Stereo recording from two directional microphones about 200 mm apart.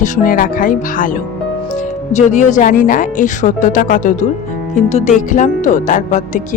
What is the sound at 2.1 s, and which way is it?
Music, 35° left (ahead or behind).